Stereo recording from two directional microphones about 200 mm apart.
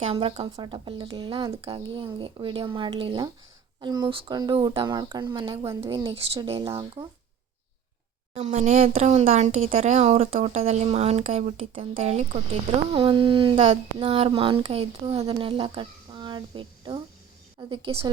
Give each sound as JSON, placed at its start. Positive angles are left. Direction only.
{"t": 0.0, "sound": "speech", "side_deg": -30}
{"t": 8.3, "sound": "speech", "side_deg": -35}